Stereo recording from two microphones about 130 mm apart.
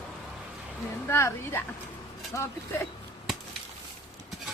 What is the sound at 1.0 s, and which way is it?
Speech, 20° left (ahead or behind).